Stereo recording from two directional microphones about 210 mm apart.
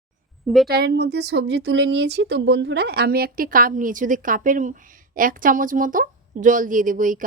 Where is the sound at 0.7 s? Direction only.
50° right (ahead or behind).